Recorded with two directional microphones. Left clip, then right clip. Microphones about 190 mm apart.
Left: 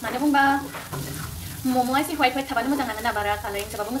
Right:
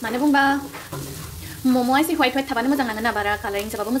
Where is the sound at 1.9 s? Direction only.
45° right (ahead or behind).